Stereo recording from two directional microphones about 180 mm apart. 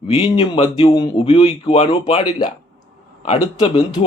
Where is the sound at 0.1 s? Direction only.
30° left (ahead or behind).